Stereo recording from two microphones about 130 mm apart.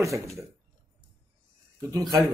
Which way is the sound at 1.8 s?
25° right (ahead or behind).